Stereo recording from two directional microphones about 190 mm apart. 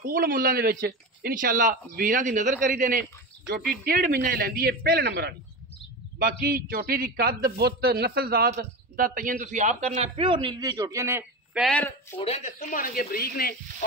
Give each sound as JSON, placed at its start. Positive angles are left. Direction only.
{"t": 0.0, "sound": "a man's voice", "side_deg": -50}
{"t": 11.5, "sound": "speech", "side_deg": 5}
{"t": 12.2, "sound": "speech", "side_deg": 35}
{"t": 12.5, "sound": "speech", "side_deg": 45}